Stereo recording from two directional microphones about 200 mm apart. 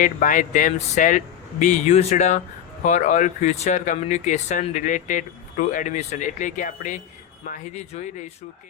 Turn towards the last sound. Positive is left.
turn(degrees=40)  # may be behind; listen again after turning